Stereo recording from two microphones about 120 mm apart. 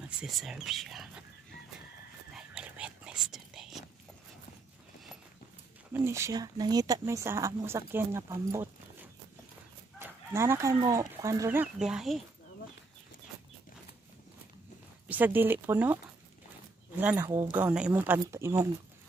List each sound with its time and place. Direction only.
0.2 s speech: 5° right (ahead or behind)
2.3 s whispering: 10° right (ahead or behind)
5.9 s speech: 25° right (ahead or behind)
9.9 s speech: 20° right (ahead or behind)
11.6 s speech: 5° right (ahead or behind)
15.0 s speech: 15° right (ahead or behind)
17.0 s speech: 10° right (ahead or behind)